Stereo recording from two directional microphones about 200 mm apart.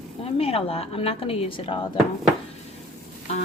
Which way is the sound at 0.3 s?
30° left (ahead or behind).